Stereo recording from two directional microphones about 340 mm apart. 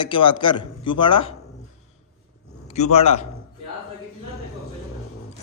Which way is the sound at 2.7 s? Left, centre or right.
Centre.